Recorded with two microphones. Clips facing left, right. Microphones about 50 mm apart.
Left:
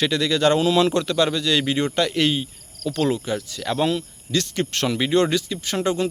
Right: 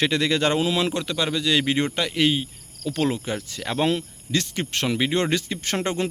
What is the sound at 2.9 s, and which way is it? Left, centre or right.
Speech, right.